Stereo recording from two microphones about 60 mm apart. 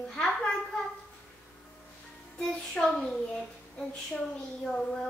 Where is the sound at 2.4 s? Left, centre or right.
Centre.